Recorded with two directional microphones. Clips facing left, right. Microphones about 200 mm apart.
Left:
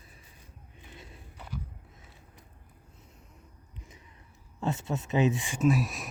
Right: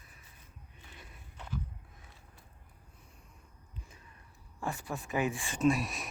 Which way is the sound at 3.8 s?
20° left (ahead or behind).